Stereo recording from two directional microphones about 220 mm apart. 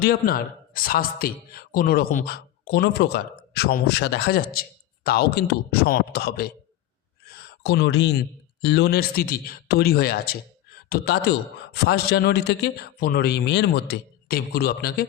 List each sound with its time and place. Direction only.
0.0 s a man's voice: 45° left (ahead or behind)
7.6 s a man's voice: 50° left (ahead or behind)